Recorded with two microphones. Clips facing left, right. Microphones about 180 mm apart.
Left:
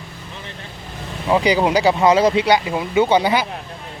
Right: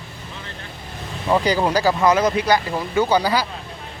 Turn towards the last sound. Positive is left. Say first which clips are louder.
# left 3 dB
turn(degrees=20)  # may be behind; listen again after turning